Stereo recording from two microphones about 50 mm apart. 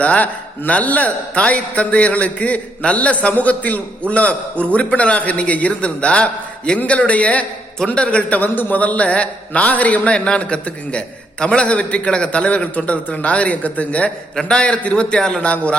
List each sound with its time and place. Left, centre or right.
0.0 s a man's voice: left
15.4 s a man's voice: left